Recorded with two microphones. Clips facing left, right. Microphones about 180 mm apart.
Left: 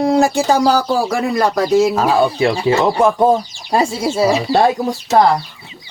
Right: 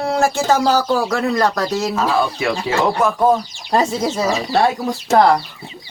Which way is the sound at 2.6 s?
25° left (ahead or behind).